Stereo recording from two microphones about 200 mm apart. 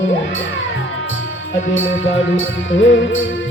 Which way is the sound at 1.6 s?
70° left (ahead or behind).